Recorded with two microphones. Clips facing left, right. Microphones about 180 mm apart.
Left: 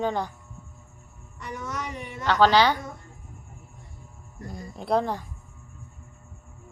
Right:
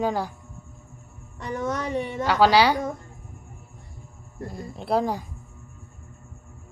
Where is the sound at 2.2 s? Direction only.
10° right (ahead or behind).